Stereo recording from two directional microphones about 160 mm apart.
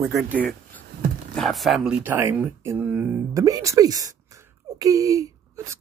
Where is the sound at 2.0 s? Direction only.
15° right (ahead or behind).